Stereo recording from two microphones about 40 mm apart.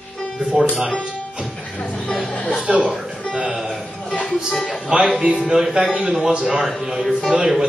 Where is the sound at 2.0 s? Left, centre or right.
Left.